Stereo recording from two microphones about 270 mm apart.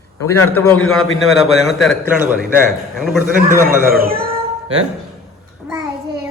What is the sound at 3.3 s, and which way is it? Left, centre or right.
Speech, right.